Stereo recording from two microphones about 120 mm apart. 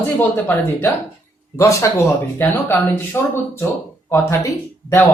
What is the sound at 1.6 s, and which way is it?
Speech, 25° left (ahead or behind).